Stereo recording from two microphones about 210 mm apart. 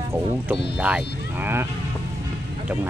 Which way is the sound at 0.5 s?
5° right (ahead or behind).